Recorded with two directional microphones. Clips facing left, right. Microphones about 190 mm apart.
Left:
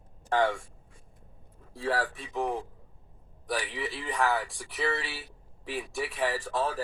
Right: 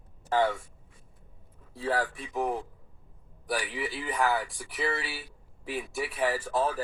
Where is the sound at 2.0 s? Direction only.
30° left (ahead or behind).